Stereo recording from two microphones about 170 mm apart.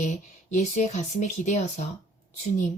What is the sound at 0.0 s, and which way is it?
Speech, 45° left (ahead or behind).